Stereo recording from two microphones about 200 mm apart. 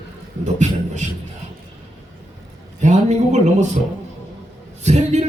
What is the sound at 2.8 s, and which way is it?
A man's voice, 35° right (ahead or behind).